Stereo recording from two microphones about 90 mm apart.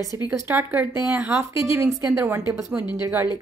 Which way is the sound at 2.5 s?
40° right (ahead or behind).